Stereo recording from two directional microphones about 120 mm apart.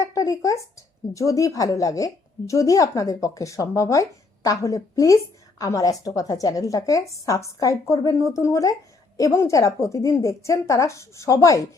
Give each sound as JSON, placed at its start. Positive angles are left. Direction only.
{"t": 0.0, "sound": "a woman's voice", "side_deg": 25}